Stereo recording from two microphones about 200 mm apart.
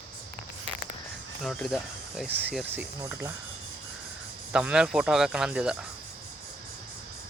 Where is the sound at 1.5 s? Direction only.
5° left (ahead or behind); by 3.3 s 15° right (ahead or behind).